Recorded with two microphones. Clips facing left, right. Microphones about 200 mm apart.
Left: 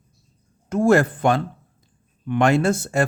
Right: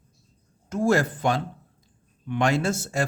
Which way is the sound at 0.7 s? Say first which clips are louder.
Left 5 dB; 60° left (ahead or behind).